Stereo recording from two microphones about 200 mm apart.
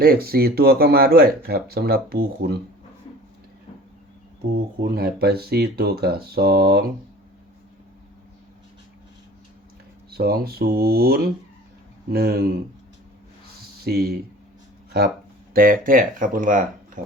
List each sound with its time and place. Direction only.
0.0 s speech: 50° right (ahead or behind)
4.8 s speech: 50° right (ahead or behind)
10.1 s speech: 50° right (ahead or behind)
13.8 s speech: 50° right (ahead or behind)
15.5 s speech: 45° right (ahead or behind)